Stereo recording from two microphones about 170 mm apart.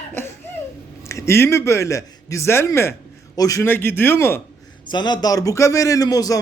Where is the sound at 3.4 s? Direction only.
20° left (ahead or behind).